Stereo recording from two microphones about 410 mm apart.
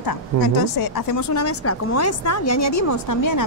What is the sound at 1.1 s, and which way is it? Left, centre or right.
A woman's voice, left.